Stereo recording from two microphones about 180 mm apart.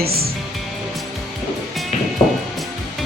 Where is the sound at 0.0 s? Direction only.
60° right (ahead or behind).